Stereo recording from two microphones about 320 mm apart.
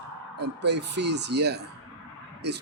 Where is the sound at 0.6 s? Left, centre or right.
Right.